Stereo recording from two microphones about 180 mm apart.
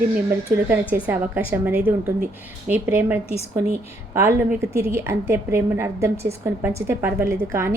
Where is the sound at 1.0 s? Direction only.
10° right (ahead or behind).